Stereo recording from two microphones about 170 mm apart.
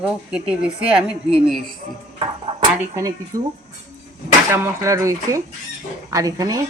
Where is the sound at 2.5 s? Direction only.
35° right (ahead or behind).